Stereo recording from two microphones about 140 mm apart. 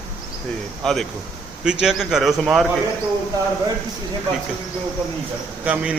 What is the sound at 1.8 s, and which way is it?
Speech, 5° right (ahead or behind).